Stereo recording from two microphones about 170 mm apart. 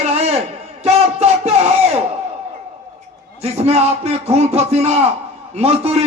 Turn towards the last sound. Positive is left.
turn(degrees=-35)  # may be behind; listen again after turning